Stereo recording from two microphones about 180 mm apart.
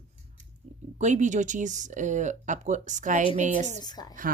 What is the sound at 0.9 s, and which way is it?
Speech, 40° right (ahead or behind).